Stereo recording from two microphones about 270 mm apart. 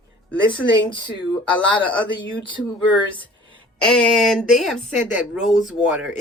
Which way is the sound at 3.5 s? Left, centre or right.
Centre.